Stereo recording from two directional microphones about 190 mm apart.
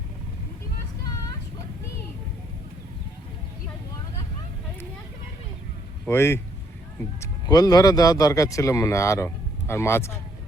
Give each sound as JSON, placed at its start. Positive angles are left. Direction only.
{"t": 6.1, "sound": "speech", "side_deg": 10}